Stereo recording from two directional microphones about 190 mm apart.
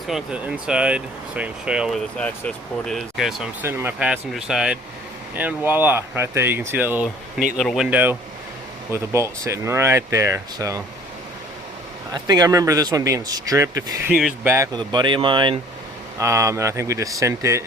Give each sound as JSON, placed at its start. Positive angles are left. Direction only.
{"t": 0.1, "sound": "speech", "side_deg": -5}
{"t": 12.1, "sound": "speech", "side_deg": -20}
{"t": 14.8, "sound": "speech", "side_deg": -25}